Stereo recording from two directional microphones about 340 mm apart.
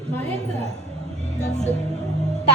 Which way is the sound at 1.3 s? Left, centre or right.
Centre.